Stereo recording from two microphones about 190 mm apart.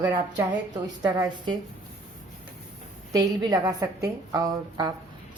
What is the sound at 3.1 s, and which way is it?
A woman's voice, 20° right (ahead or behind).